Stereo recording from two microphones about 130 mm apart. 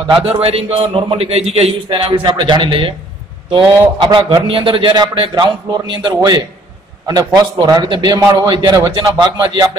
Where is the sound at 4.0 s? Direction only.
35° right (ahead or behind).